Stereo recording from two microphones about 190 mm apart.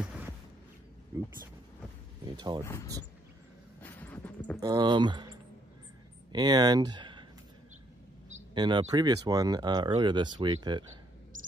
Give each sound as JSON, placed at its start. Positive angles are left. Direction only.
{"t": 0.0, "sound": "a sound", "side_deg": -5}
{"t": 2.2, "sound": "speech", "side_deg": -20}
{"t": 2.6, "sound": "speech", "side_deg": 15}
{"t": 3.8, "sound": "a sound", "side_deg": 10}
{"t": 4.6, "sound": "speech", "side_deg": -20}
{"t": 8.5, "sound": "speech", "side_deg": -25}